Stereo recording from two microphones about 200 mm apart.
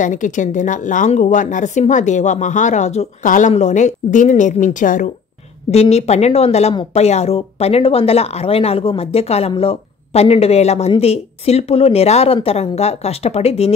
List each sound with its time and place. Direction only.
0.0 s speech: 40° left (ahead or behind)